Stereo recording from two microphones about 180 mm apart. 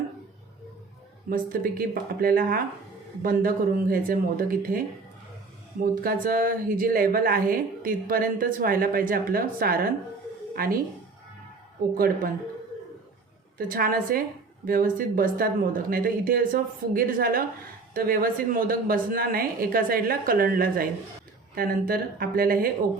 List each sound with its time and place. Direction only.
1.3 s a woman's voice: 55° right (ahead or behind)
5.8 s a woman's voice: 50° right (ahead or behind)
11.9 s a woman's voice: 55° right (ahead or behind)
13.6 s a woman's voice: 50° right (ahead or behind)